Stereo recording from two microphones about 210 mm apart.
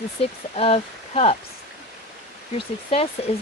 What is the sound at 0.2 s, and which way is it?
Speech, 30° left (ahead or behind).